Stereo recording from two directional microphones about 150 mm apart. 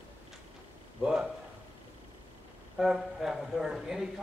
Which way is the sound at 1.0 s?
5° right (ahead or behind).